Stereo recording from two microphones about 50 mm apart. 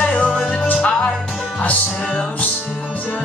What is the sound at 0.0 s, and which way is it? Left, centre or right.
Music, left.